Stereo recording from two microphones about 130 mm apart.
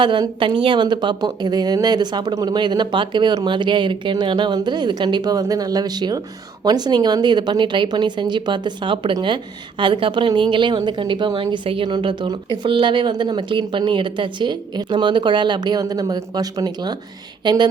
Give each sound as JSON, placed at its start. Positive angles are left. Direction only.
{"t": 0.0, "sound": "a woman's voice", "side_deg": -35}